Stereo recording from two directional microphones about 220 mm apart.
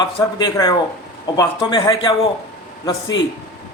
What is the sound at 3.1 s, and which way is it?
Speech, 55° left (ahead or behind).